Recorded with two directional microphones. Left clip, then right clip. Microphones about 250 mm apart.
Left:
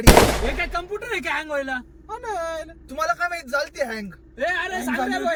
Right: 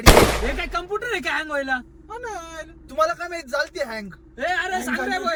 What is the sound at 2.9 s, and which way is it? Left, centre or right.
Speech, centre.